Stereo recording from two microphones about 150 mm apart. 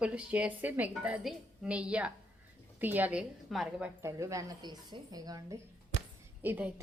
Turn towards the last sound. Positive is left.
turn(degrees=-10)  # may be behind; listen again after turning